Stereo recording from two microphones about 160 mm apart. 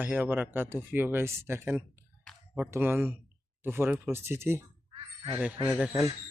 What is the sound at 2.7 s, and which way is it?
Speech, 15° right (ahead or behind).